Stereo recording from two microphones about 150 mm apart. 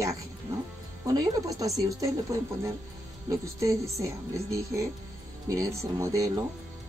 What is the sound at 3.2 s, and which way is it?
Speech, 20° right (ahead or behind).